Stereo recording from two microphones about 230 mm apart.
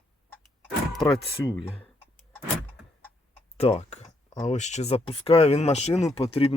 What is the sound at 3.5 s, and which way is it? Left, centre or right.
Speech, left.